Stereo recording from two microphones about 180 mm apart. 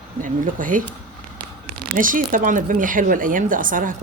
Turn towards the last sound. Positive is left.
turn(degrees=-50)  # may be behind; listen again after turning